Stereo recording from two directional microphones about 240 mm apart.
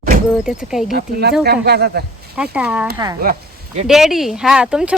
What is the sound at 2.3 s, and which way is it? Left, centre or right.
Speech, centre.